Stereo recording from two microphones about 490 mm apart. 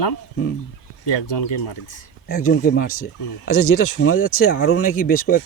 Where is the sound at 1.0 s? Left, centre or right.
Left.